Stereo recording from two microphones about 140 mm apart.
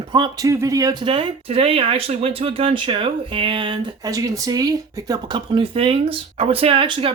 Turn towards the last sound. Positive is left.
turn(degrees=-40)  # may be behind; listen again after turning